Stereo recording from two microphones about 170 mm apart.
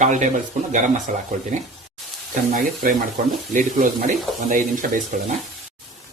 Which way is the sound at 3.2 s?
50° right (ahead or behind).